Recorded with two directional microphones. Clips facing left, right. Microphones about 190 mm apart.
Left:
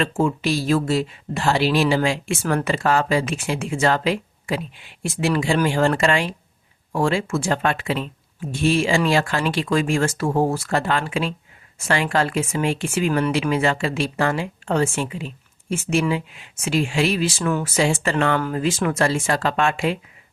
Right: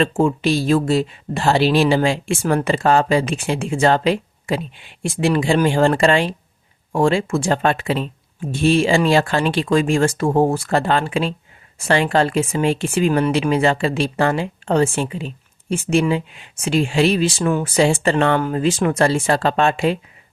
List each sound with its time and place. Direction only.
0.0 s speech: 30° right (ahead or behind)